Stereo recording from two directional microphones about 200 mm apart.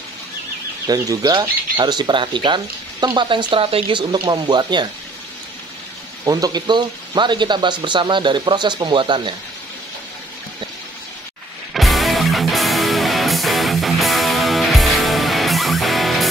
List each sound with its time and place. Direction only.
0.8 s speech: 20° right (ahead or behind)
6.2 s speech: 20° right (ahead or behind)
11.7 s music: centre (ahead or behind)